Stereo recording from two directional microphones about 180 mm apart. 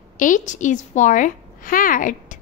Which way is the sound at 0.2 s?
45° left (ahead or behind).